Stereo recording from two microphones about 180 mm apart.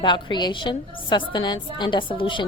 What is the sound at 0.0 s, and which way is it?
A woman's voice, 25° left (ahead or behind).